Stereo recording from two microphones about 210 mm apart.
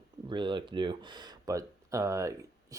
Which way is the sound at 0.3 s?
20° right (ahead or behind).